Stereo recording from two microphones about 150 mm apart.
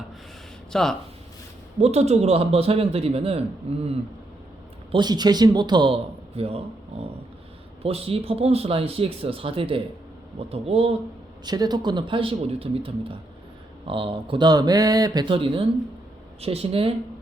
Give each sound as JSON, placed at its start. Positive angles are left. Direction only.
{"t": 0.7, "sound": "speech", "side_deg": 5}
{"t": 1.8, "sound": "a man's voice", "side_deg": -45}
{"t": 4.9, "sound": "speech", "side_deg": -30}
{"t": 7.8, "sound": "speech", "side_deg": -40}
{"t": 11.4, "sound": "speech", "side_deg": -30}